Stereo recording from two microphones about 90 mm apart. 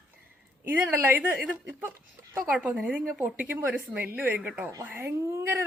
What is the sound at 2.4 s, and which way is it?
A woman's voice, 15° right (ahead or behind).